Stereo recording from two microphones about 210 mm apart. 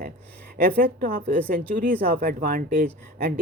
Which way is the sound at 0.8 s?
45° right (ahead or behind).